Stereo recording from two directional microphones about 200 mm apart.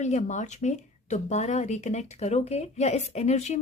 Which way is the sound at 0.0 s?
35° left (ahead or behind).